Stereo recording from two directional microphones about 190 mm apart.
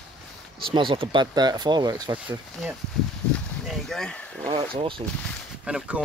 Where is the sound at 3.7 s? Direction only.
Centre (ahead or behind).